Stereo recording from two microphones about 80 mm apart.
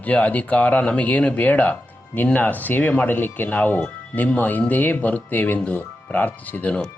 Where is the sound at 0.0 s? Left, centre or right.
Centre.